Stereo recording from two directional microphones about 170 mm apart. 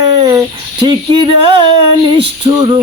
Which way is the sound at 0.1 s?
20° right (ahead or behind).